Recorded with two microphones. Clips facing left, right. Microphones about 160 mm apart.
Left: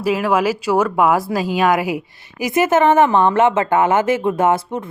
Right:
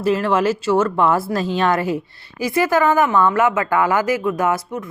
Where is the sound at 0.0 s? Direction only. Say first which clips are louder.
Even; 10° left (ahead or behind).